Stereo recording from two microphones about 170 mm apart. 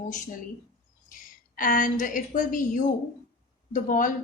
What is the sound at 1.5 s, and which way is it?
A woman's voice, 55° left (ahead or behind).